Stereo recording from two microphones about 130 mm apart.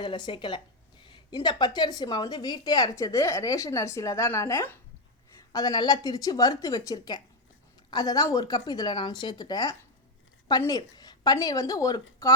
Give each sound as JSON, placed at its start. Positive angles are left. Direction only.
{"t": 0.0, "sound": "a woman's voice", "side_deg": 35}
{"t": 5.4, "sound": "a woman's voice", "side_deg": 30}